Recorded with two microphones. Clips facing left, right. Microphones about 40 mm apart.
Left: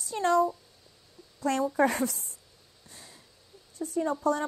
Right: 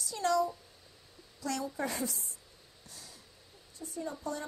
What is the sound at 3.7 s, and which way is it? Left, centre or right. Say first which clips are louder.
Speech: left 10 dB; left.